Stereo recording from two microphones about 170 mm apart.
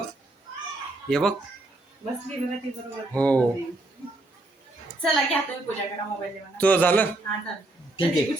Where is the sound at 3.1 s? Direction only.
10° left (ahead or behind).